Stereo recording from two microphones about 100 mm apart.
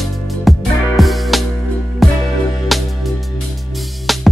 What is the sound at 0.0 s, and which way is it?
Music, centre (ahead or behind).